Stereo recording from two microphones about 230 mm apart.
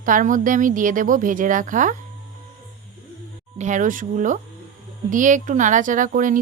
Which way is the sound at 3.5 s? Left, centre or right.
Right.